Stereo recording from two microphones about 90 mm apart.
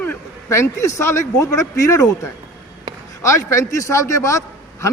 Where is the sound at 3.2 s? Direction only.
35° left (ahead or behind).